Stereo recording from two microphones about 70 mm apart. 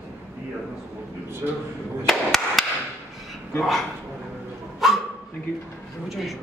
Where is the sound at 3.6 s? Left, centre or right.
Centre.